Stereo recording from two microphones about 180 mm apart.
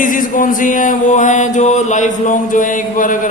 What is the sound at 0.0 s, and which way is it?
Music, 45° left (ahead or behind).